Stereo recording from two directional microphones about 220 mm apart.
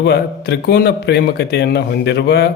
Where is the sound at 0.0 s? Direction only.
50° left (ahead or behind).